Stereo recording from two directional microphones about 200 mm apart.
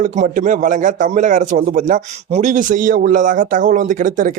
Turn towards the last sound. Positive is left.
turn(degrees=-40)  # may be behind; listen again after turning